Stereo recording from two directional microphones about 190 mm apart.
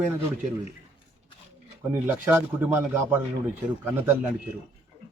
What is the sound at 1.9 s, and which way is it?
A man's voice, 10° right (ahead or behind).